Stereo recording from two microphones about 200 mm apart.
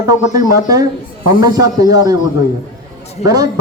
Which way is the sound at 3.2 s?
20° right (ahead or behind).